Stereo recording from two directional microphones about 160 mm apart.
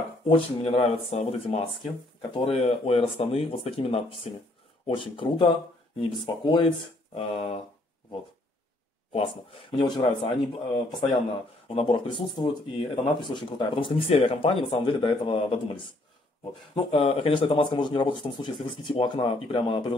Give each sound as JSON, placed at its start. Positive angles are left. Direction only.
{"t": 0.3, "sound": "speech", "side_deg": 35}
{"t": 9.1, "sound": "speech", "side_deg": 35}
{"t": 11.7, "sound": "speech", "side_deg": 35}